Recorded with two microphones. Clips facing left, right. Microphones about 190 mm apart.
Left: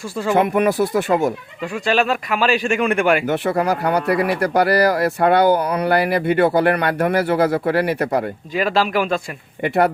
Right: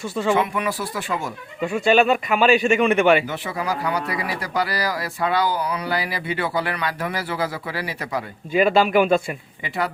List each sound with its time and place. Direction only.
0.3 s speech: 55° left (ahead or behind)
1.6 s a man's voice: 5° right (ahead or behind)
3.2 s speech: 60° left (ahead or behind)
8.5 s a man's voice: centre (ahead or behind)
9.6 s speech: 60° left (ahead or behind)